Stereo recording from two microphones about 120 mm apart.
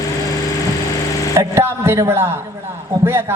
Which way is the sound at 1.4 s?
20° right (ahead or behind).